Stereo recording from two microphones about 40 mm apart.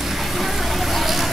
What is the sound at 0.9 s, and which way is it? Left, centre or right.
Vehicle, centre.